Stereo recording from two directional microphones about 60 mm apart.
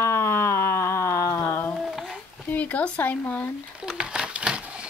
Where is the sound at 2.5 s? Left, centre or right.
Left.